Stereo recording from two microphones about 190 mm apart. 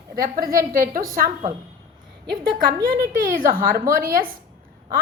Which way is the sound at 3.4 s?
50° right (ahead or behind).